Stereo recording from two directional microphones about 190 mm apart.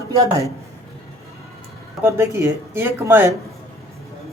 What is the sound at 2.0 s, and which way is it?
Speech, 15° right (ahead or behind).